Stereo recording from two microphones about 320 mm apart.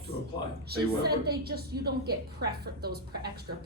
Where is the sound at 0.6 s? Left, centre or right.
Right.